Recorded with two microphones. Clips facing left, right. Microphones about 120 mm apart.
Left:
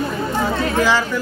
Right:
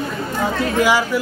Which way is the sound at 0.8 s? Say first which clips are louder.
Right 2 dB; 10° right (ahead or behind).